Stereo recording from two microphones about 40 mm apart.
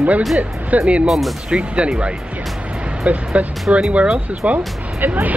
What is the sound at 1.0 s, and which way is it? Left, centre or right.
Speech, centre.